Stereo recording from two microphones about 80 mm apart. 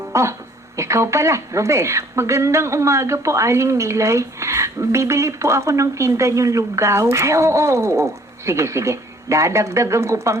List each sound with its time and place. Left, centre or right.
0.1 s a woman's voice: right